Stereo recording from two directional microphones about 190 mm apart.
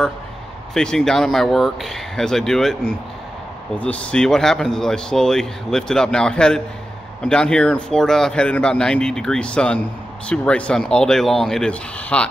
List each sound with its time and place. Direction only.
0.7 s speech: 5° left (ahead or behind)